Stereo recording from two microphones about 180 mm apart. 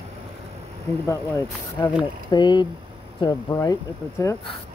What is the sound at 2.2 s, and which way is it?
Speech, 25° left (ahead or behind).